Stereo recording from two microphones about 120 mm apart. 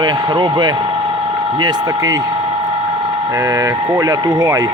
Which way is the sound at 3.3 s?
25° right (ahead or behind).